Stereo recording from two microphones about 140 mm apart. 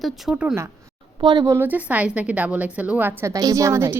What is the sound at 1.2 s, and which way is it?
Speech, 35° right (ahead or behind).